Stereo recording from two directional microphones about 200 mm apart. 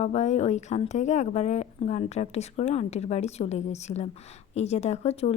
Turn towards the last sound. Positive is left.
turn(degrees=35)  # may be behind; listen again after turning